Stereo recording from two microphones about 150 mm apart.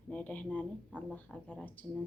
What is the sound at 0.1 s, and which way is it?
Speech, 10° left (ahead or behind).